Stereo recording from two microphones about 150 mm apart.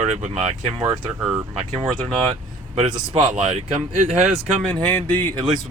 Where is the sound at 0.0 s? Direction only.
50° right (ahead or behind).